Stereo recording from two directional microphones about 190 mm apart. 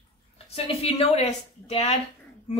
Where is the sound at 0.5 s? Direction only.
30° left (ahead or behind).